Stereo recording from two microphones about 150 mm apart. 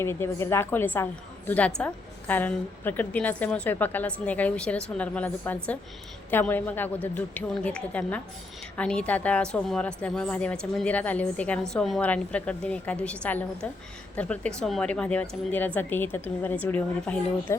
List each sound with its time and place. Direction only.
0.0 s a woman's voice: 15° left (ahead or behind)